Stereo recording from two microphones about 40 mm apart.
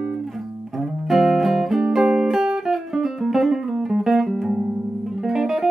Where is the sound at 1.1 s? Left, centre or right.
Centre.